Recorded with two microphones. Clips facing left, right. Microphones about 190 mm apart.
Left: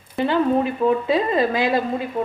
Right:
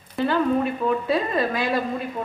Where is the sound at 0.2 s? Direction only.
25° left (ahead or behind).